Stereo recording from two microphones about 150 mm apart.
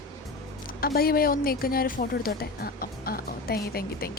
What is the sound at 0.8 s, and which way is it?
Speech, 90° left.